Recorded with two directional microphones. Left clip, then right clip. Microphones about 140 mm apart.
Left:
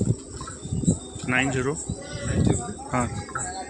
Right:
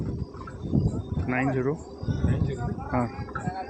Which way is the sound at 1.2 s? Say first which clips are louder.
Left 3 dB; 5° left (ahead or behind).